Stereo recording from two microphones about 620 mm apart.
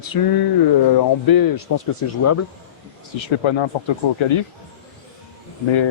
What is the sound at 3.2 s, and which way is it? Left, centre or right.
Speech, left.